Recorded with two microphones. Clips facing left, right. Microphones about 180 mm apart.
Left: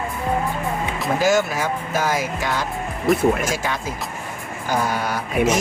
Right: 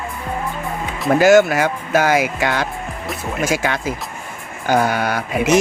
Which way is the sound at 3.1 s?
Centre (ahead or behind).